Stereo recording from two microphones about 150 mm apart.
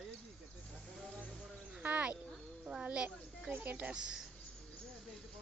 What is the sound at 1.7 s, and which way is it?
Speech, 10° right (ahead or behind).